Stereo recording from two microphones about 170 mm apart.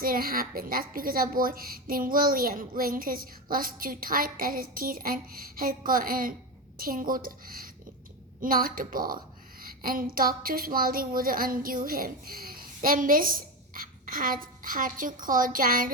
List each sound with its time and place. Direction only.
0.0 s a woman's voice: 60° right (ahead or behind)